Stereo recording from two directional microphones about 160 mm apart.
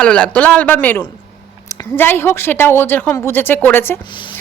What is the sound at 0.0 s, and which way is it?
A woman's voice, 5° left (ahead or behind).